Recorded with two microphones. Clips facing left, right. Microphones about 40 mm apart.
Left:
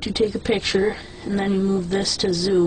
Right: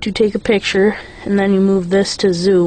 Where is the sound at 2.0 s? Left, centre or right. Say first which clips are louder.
Right 8 dB; right.